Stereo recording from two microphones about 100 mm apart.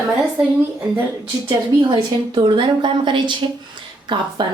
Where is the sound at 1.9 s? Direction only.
50° right (ahead or behind).